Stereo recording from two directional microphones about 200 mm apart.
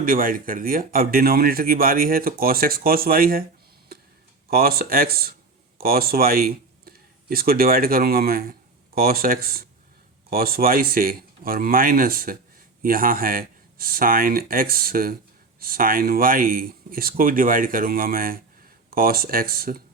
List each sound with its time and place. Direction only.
0.0 s speech: 45° right (ahead or behind)
4.4 s speech: 50° right (ahead or behind)